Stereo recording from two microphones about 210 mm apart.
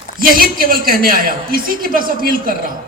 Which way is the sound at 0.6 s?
45° right (ahead or behind).